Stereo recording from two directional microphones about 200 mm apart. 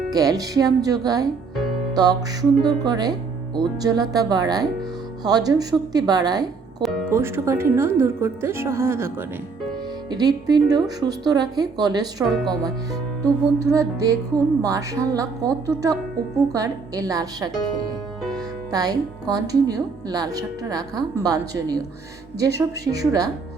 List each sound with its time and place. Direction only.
0.1 s a woman's voice: 20° right (ahead or behind)
12.3 s speech: centre (ahead or behind)
13.2 s a woman's voice: 15° right (ahead or behind)